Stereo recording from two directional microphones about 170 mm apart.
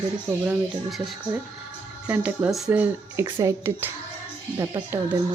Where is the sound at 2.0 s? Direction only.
10° right (ahead or behind).